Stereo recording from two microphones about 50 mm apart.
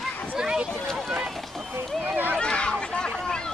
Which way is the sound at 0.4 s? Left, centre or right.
Centre.